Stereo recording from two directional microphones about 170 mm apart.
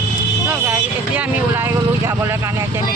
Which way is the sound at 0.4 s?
10° right (ahead or behind).